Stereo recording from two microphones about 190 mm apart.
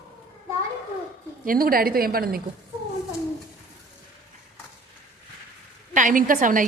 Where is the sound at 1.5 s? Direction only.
50° right (ahead or behind).